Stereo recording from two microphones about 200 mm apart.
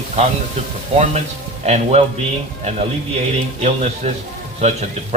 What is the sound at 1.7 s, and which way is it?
Speech, 35° right (ahead or behind).